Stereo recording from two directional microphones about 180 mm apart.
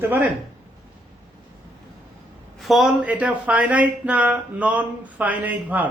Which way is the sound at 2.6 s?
Centre (ahead or behind).